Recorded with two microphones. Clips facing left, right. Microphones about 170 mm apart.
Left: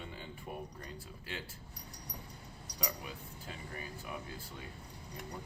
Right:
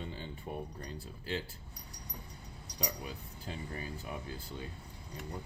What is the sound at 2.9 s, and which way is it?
Speech, 30° right (ahead or behind).